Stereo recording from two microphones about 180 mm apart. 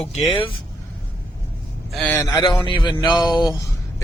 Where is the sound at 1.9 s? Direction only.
5° left (ahead or behind).